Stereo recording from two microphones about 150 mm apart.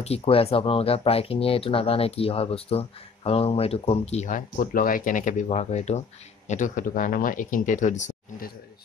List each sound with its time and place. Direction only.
0.0 s speech: 40° left (ahead or behind)
4.6 s speech: 70° left (ahead or behind)